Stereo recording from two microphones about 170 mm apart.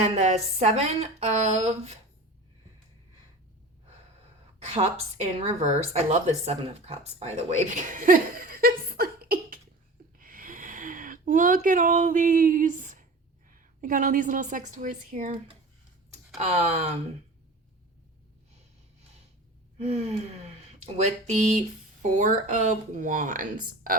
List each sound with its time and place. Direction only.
0.0 s speech: 40° right (ahead or behind)
4.6 s speech: 40° right (ahead or behind)
7.6 s speech: 50° right (ahead or behind)
10.2 s a sound: 55° right (ahead or behind)
13.5 s a woman's voice: 50° right (ahead or behind)
16.4 s speech: 40° right (ahead or behind)
19.8 s a woman's voice: 40° right (ahead or behind); by 23.9 s 55° right (ahead or behind)